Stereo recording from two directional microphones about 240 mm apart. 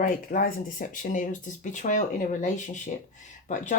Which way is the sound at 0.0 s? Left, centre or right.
Left.